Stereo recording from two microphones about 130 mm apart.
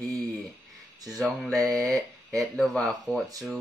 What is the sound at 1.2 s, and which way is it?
Speech, centre (ahead or behind).